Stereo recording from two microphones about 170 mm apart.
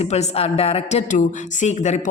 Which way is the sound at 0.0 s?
40° left (ahead or behind).